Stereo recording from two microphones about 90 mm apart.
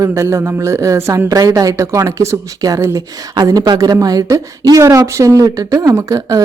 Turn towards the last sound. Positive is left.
turn(degrees=-40)  # may be behind; listen again after turning